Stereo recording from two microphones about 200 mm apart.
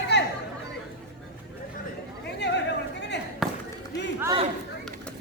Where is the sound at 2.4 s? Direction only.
60° left (ahead or behind).